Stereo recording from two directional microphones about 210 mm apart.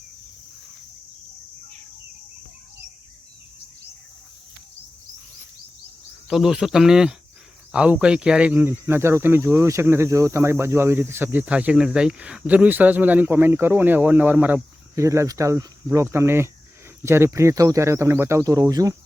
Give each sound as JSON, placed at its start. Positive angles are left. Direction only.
{"t": 6.2, "sound": "speech", "side_deg": 0}